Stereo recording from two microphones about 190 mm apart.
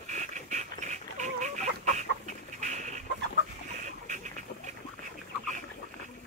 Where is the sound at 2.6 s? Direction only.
40° right (ahead or behind).